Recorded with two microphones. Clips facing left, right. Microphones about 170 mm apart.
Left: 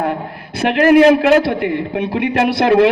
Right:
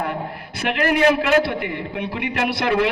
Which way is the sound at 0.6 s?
40° left (ahead or behind).